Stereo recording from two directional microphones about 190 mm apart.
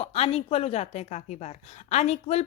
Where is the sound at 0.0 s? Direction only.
35° left (ahead or behind).